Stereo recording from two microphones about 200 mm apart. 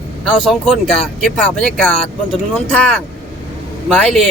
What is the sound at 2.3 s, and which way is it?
Speech, 5° left (ahead or behind).